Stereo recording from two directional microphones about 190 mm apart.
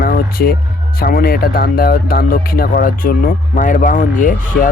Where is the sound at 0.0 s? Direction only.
50° left (ahead or behind).